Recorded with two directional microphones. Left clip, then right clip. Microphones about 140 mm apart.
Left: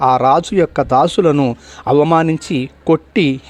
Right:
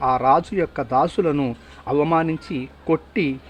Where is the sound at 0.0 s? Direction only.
40° left (ahead or behind).